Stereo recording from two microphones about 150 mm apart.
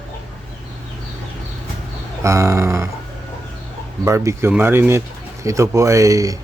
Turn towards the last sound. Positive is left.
turn(degrees=-20)  # may be behind; listen again after turning